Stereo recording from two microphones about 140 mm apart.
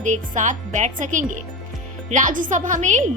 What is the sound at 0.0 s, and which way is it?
A woman's voice, 65° right (ahead or behind).